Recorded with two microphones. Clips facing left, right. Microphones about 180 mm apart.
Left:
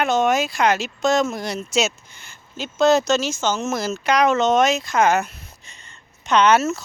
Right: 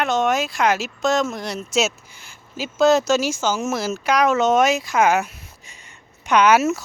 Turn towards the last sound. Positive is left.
turn(degrees=-10)  # may be behind; listen again after turning